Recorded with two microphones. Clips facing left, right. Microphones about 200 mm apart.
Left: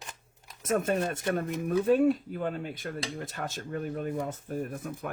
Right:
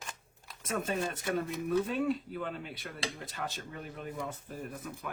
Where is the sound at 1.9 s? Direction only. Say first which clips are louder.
Left 9 dB; 50° left (ahead or behind).